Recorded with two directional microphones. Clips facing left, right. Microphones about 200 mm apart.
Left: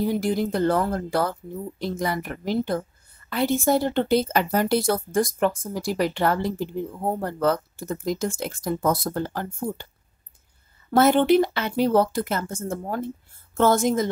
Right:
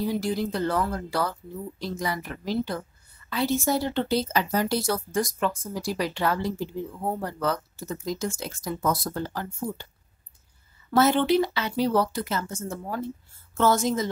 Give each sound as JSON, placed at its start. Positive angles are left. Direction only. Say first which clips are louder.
{"t": 0.0, "sound": "a woman's voice", "louder": "left 3 dB", "side_deg": 50}
{"t": 10.9, "sound": "a woman's voice", "louder": "left 3 dB", "side_deg": 50}